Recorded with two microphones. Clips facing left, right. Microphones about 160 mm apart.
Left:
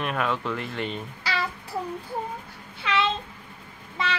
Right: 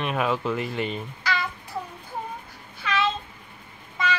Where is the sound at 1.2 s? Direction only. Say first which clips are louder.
Right 1 dB; 30° left (ahead or behind).